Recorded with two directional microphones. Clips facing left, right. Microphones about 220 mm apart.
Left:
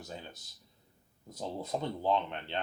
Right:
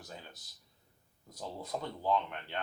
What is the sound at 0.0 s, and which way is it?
Speech, 25° left (ahead or behind).